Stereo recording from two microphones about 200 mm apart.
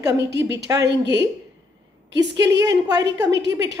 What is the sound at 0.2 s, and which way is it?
A woman's voice, 60° right (ahead or behind).